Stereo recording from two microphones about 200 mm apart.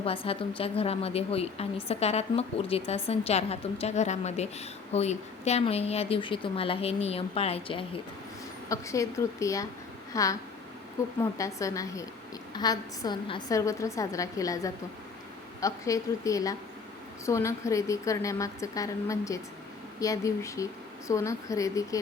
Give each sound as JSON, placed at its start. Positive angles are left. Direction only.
{"t": 0.0, "sound": "a woman's voice", "side_deg": 25}
{"t": 8.7, "sound": "a woman's voice", "side_deg": 15}